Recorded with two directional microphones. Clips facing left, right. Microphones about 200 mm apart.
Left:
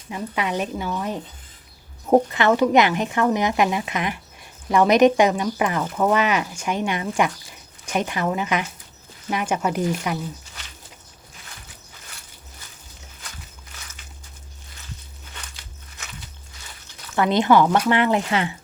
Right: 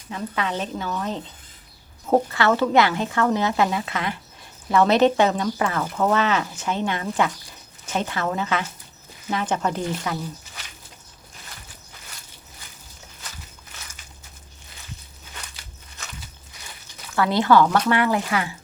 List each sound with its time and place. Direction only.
0.1 s speech: 15° left (ahead or behind)
17.2 s speech: 20° left (ahead or behind)